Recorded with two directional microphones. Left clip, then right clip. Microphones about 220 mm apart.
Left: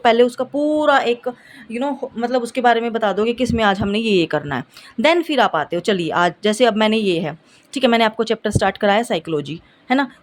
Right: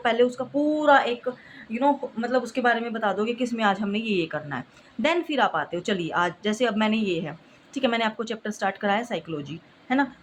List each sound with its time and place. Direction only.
0.0 s a woman's voice: 45° left (ahead or behind)